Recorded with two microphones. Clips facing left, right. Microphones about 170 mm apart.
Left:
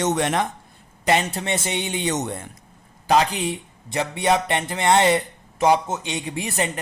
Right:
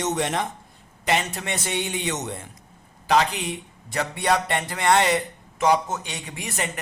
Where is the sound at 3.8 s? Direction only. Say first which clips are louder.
Left 3 dB; 20° left (ahead or behind).